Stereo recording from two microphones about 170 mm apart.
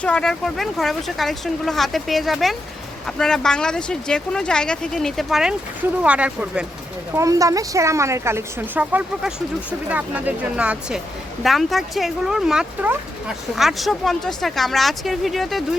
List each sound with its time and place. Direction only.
0.0 s speech: 5° left (ahead or behind)
7.2 s speech: 20° right (ahead or behind); by 15.6 s centre (ahead or behind)